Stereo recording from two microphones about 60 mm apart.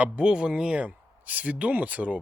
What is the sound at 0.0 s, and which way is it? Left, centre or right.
Speech, centre.